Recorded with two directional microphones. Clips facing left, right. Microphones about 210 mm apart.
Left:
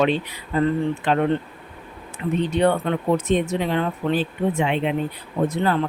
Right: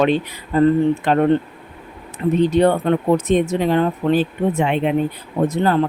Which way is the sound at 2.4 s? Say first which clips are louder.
Right 4 dB; 40° right (ahead or behind).